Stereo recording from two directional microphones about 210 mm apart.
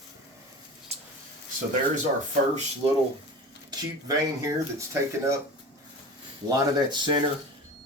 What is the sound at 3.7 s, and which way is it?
Speech, 20° right (ahead or behind).